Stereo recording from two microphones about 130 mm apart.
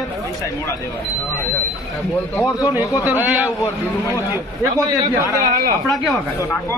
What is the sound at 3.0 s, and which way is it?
Speech, 15° right (ahead or behind).